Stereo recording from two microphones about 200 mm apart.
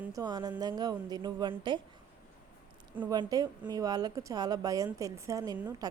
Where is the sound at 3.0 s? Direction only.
15° right (ahead or behind).